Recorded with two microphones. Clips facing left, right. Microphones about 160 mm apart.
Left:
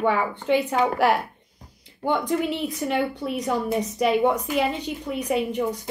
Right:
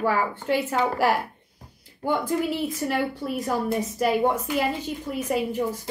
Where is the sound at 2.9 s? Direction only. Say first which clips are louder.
Left 1 dB; centre (ahead or behind).